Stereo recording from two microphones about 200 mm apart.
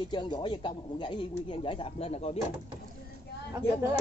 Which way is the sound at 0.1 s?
20° left (ahead or behind).